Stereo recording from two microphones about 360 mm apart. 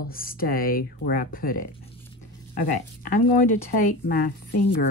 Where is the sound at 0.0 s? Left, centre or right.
Left.